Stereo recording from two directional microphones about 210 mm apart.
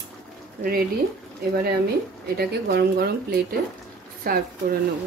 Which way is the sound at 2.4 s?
50° right (ahead or behind).